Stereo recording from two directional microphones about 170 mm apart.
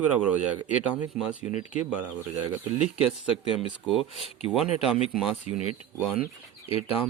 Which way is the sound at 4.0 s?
35° left (ahead or behind).